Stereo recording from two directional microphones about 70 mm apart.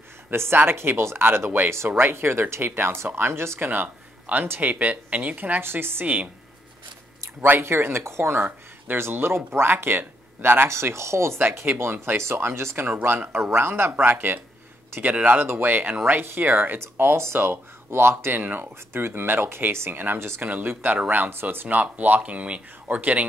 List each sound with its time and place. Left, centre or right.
0.3 s speech: right
7.4 s speech: right
10.7 s speech: right